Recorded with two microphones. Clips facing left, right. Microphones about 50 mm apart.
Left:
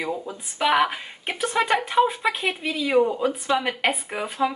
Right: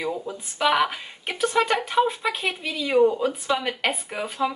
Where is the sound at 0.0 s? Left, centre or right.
Centre.